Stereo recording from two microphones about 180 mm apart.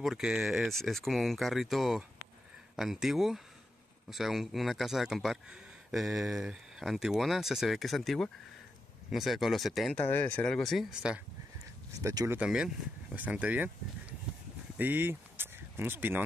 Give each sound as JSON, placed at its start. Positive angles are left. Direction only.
{"t": 0.0, "sound": "speech", "side_deg": 0}
{"t": 12.0, "sound": "speech", "side_deg": -20}
{"t": 12.4, "sound": "speech", "side_deg": -5}
{"t": 14.8, "sound": "speech", "side_deg": -10}